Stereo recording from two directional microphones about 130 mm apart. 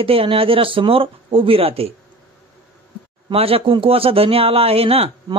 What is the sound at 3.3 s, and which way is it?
Speech, 45° right (ahead or behind).